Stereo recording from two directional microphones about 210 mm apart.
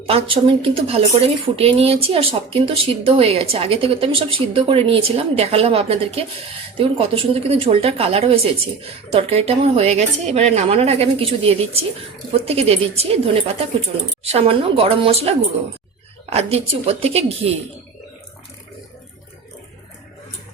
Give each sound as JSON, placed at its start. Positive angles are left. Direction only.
{"t": 0.0, "sound": "speech", "side_deg": -25}